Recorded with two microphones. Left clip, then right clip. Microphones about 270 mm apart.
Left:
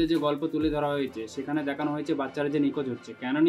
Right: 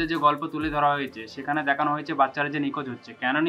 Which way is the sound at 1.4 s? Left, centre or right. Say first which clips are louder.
Right 7 dB; right.